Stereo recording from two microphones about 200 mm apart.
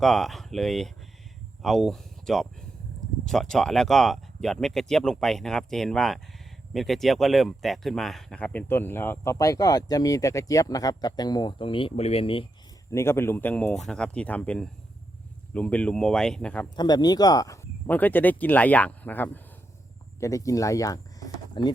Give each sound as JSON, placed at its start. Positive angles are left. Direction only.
{"t": 0.0, "sound": "speech", "side_deg": 0}
{"t": 12.9, "sound": "speech", "side_deg": 10}
{"t": 16.6, "sound": "speech", "side_deg": 20}